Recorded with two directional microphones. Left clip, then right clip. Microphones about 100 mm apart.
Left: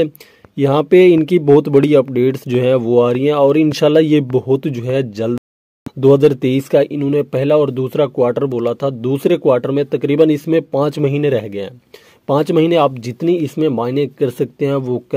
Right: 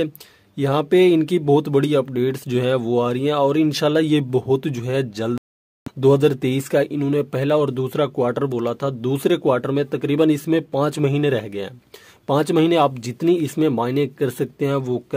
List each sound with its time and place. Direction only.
0.6 s speech: 35° left (ahead or behind)